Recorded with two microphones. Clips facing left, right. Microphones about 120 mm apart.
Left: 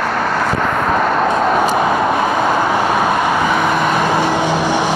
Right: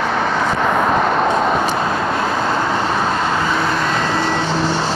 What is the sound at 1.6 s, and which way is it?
Vehicle, 15° left (ahead or behind).